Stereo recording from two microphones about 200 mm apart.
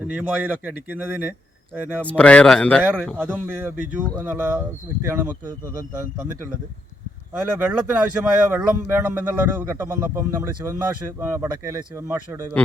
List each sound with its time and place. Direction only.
0.1 s speech: 10° right (ahead or behind)
2.0 s speech: 5° left (ahead or behind); by 5.3 s 10° right (ahead or behind)
7.3 s speech: 10° right (ahead or behind)